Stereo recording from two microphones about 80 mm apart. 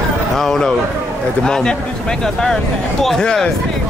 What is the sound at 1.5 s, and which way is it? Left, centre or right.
Speech, centre.